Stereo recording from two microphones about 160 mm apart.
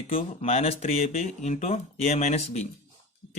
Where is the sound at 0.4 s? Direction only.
40° left (ahead or behind).